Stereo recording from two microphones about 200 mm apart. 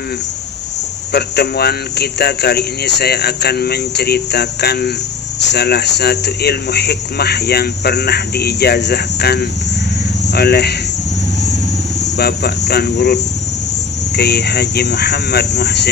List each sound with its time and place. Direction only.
1.1 s speech: 55° left (ahead or behind)
12.0 s speech: 55° left (ahead or behind)